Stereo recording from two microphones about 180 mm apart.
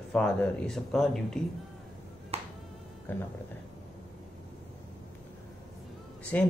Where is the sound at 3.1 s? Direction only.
10° left (ahead or behind).